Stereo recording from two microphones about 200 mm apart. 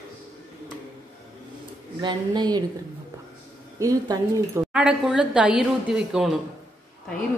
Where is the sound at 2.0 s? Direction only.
20° right (ahead or behind).